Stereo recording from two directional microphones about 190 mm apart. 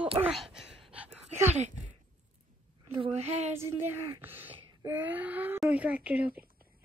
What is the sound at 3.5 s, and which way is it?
A woman's voice, 15° right (ahead or behind).